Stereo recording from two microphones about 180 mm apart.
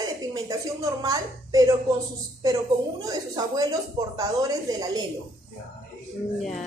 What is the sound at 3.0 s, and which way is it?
A woman's voice, 20° right (ahead or behind).